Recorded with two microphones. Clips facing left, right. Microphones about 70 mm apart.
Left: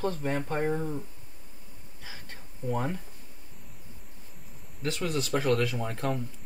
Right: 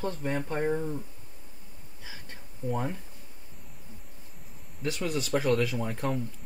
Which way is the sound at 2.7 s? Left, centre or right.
Centre.